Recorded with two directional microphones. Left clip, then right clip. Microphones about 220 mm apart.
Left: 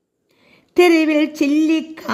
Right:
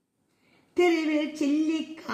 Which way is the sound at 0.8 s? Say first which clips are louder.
Left 11 dB; 45° left (ahead or behind).